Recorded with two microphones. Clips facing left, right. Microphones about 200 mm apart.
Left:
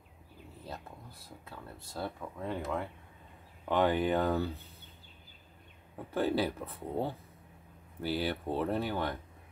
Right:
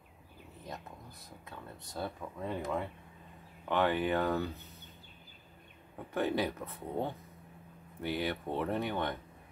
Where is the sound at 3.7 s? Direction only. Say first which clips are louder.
Left 2 dB; 15° left (ahead or behind).